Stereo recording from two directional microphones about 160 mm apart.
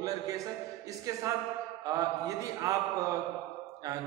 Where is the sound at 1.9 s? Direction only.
20° right (ahead or behind).